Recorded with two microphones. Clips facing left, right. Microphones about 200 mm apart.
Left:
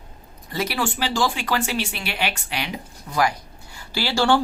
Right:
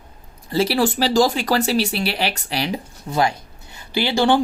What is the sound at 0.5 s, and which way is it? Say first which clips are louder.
Speech: right 7 dB; 30° right (ahead or behind).